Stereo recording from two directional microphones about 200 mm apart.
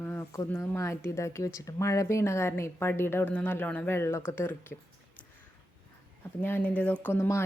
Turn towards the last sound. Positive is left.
turn(degrees=15)  # may be behind; listen again after turning